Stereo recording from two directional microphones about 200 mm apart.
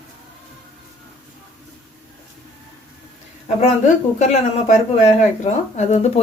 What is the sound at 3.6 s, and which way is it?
A woman's voice, 35° left (ahead or behind).